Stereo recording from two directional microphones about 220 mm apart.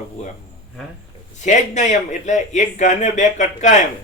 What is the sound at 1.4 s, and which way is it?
Speech, 35° left (ahead or behind).